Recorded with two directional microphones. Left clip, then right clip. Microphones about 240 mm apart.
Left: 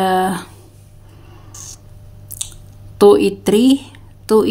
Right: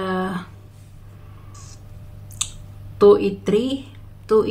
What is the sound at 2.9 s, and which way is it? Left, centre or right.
Speech, left.